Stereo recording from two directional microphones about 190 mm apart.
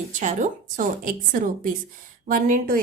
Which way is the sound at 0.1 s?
40° right (ahead or behind).